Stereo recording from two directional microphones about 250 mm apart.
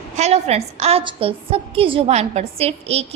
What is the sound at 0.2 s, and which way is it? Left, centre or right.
A woman's voice, right.